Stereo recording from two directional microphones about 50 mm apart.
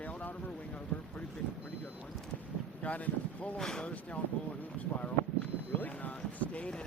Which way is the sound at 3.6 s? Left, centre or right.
Centre.